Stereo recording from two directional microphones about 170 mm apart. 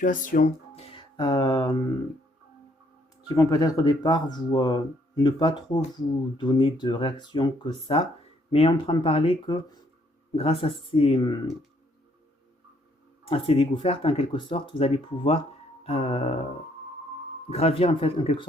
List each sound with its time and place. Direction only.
0.0 s speech: 50° left (ahead or behind)
0.8 s music: 30° left (ahead or behind)
3.3 s speech: 20° left (ahead or behind)
13.2 s speech: 35° left (ahead or behind)
17.5 s speech: 35° left (ahead or behind)